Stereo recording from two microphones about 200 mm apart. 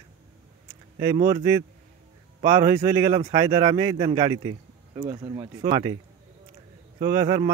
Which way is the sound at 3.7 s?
20° right (ahead or behind).